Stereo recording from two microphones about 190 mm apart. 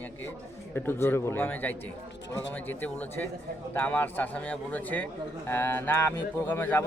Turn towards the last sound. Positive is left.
turn(degrees=10)  # may be behind; listen again after turning